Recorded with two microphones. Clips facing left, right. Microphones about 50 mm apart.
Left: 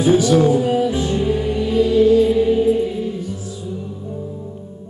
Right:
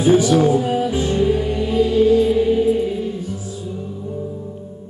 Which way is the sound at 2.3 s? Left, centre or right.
Centre.